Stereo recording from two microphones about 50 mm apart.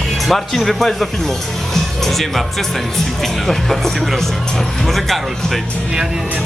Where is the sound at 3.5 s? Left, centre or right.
Centre.